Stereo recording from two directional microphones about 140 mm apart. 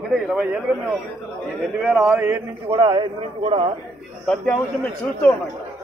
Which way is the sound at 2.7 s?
35° right (ahead or behind).